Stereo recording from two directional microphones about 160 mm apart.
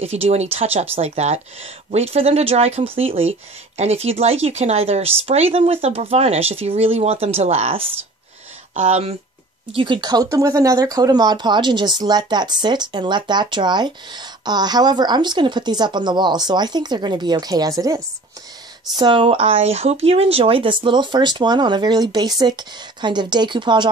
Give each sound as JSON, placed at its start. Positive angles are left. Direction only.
{"t": 0.0, "sound": "speech", "side_deg": -40}
{"t": 9.7, "sound": "speech", "side_deg": -30}